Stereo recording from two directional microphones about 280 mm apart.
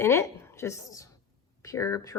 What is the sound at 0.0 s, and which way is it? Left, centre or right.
A woman's voice, centre.